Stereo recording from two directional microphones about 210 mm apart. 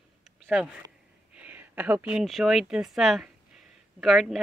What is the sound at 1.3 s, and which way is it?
A woman's voice, 5° right (ahead or behind).